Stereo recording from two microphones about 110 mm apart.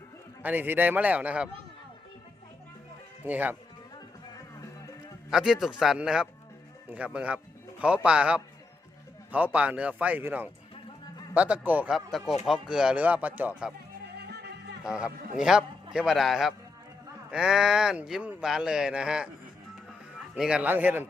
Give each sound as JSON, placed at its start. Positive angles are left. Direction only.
{"t": 0.4, "sound": "speech", "side_deg": -15}
{"t": 3.2, "sound": "speech", "side_deg": -15}
{"t": 5.3, "sound": "a man's voice", "side_deg": -5}
{"t": 11.9, "sound": "a man's voice", "side_deg": 0}
{"t": 14.8, "sound": "a man's voice", "side_deg": -5}
{"t": 20.3, "sound": "speech", "side_deg": -5}